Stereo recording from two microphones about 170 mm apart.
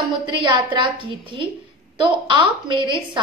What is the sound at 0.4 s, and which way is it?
A woman's voice, 30° right (ahead or behind).